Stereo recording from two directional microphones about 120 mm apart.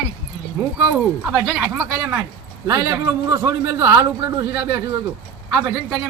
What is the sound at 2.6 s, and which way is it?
A man's voice, 20° right (ahead or behind).